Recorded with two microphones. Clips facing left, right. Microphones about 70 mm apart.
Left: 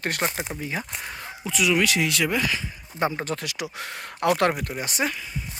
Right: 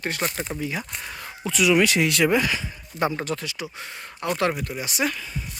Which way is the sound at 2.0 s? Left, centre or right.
Right.